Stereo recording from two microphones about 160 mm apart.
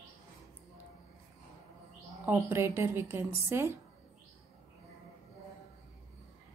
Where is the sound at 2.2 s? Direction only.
15° right (ahead or behind).